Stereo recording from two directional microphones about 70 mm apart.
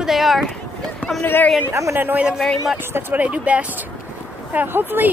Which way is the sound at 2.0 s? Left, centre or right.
Right.